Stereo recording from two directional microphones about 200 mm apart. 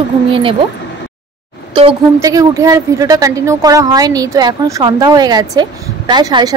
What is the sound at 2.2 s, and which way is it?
A woman's voice, 15° right (ahead or behind).